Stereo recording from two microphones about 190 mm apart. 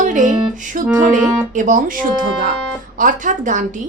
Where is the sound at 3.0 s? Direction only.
45° right (ahead or behind).